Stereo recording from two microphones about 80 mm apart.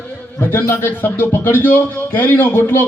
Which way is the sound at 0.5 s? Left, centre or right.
Left.